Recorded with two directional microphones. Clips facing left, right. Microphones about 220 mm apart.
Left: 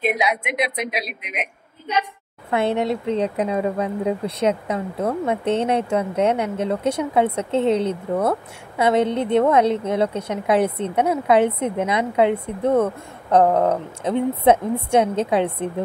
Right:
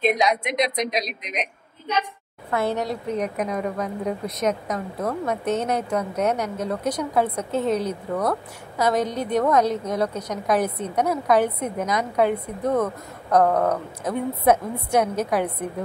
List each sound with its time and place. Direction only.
0.0 s a woman's voice: 5° left (ahead or behind)
2.5 s speech: 25° left (ahead or behind)